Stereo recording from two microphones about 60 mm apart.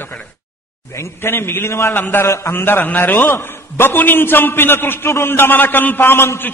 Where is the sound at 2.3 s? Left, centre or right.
Left.